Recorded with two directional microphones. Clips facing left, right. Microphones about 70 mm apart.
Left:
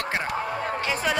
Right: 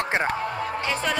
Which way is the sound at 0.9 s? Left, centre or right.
Centre.